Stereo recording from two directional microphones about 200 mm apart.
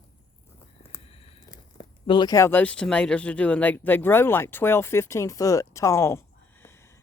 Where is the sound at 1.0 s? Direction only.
30° left (ahead or behind).